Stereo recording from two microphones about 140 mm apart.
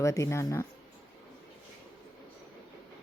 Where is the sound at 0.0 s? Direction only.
20° left (ahead or behind).